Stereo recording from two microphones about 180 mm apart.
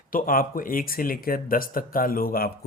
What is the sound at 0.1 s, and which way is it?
Speech, 50° left (ahead or behind).